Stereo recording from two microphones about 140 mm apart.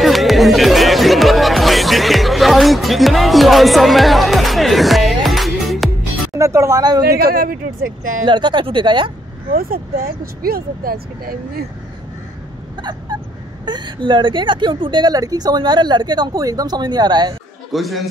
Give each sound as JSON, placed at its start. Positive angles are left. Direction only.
{"t": 0.0, "sound": "music", "side_deg": 0}
{"t": 6.3, "sound": "speech", "side_deg": -20}
{"t": 7.1, "sound": "speech", "side_deg": -90}
{"t": 8.3, "sound": "a woman's voice", "side_deg": -35}
{"t": 9.5, "sound": "speech", "side_deg": -90}
{"t": 13.7, "sound": "a woman's voice", "side_deg": -35}
{"t": 17.7, "sound": "a man's voice", "side_deg": 0}